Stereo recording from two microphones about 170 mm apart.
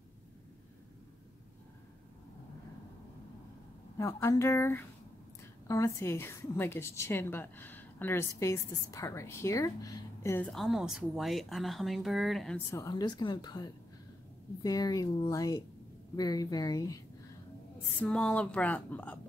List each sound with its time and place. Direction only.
4.0 s a woman's voice: 15° left (ahead or behind)
10.5 s a woman's voice: centre (ahead or behind)
12.7 s a woman's voice: 20° left (ahead or behind)
18.0 s a woman's voice: 5° left (ahead or behind)